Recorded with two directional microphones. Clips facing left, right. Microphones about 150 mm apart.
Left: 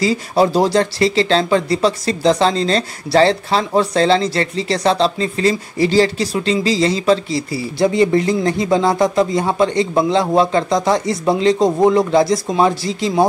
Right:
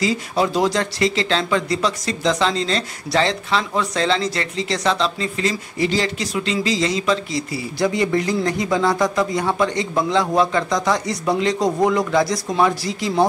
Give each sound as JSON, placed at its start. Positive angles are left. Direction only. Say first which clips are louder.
{"t": 0.0, "sound": "speech", "louder": "left 5 dB", "side_deg": 35}